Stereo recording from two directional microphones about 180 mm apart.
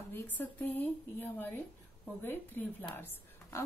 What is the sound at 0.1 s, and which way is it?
A woman's voice, 10° left (ahead or behind).